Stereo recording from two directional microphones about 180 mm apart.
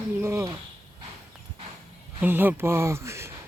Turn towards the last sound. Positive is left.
turn(degrees=-15)  # may be behind; listen again after turning